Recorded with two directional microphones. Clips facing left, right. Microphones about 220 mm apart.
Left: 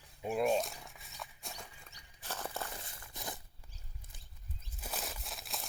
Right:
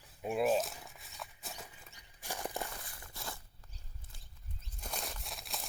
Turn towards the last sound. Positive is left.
turn(degrees=0)  # may be behind; listen again after turning